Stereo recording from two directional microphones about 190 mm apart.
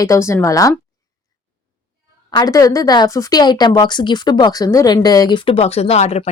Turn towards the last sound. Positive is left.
turn(degrees=35)  # may be behind; listen again after turning